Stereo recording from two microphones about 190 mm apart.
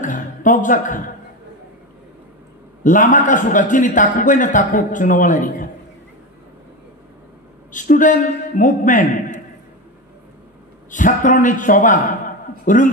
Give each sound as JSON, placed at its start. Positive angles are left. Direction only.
{"t": 0.0, "sound": "a sound", "side_deg": 45}
{"t": 2.8, "sound": "a man's voice", "side_deg": 40}
{"t": 7.7, "sound": "a man's voice", "side_deg": 45}
{"t": 10.9, "sound": "a man's voice", "side_deg": 45}